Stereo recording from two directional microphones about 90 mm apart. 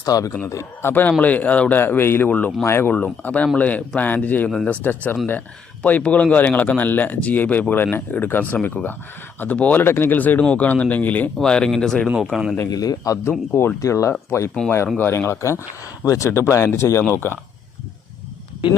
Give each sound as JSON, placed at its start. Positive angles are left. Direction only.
{"t": 0.0, "sound": "a man's voice", "side_deg": 40}
{"t": 12.7, "sound": "a man's voice", "side_deg": 45}
{"t": 13.5, "sound": "speech", "side_deg": 20}
{"t": 13.7, "sound": "speech", "side_deg": 35}